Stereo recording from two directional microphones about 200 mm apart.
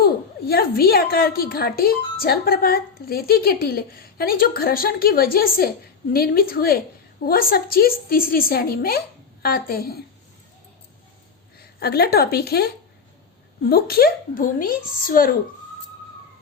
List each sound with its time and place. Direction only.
0.0 s a woman's voice: 50° left (ahead or behind)
11.6 s a woman's voice: 50° left (ahead or behind)